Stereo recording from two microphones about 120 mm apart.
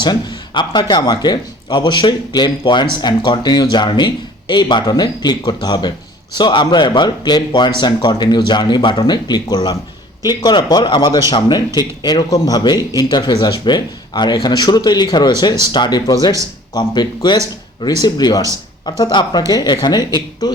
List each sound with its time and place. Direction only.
0.0 s speech: 40° left (ahead or behind)